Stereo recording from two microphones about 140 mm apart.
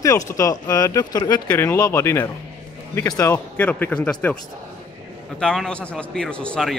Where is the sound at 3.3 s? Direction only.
10° left (ahead or behind).